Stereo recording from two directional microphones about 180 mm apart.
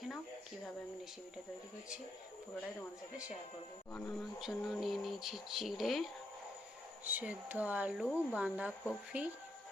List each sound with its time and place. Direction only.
3.9 s speech: 5° left (ahead or behind)